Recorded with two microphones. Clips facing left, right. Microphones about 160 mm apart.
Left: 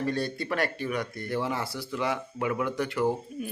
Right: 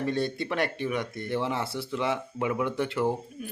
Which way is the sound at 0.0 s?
20° right (ahead or behind).